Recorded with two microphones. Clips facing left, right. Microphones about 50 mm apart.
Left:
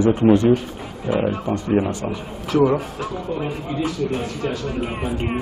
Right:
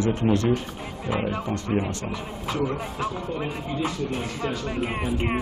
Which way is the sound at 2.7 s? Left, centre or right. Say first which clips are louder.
Left 4 dB; centre.